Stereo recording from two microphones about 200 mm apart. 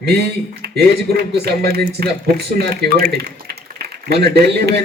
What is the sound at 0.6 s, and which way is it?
A man's voice, 55° right (ahead or behind).